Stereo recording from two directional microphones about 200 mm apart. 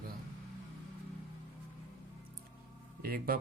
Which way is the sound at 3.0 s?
45° right (ahead or behind).